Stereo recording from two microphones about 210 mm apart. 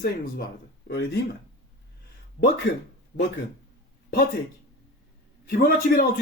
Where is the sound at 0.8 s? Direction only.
50° left (ahead or behind).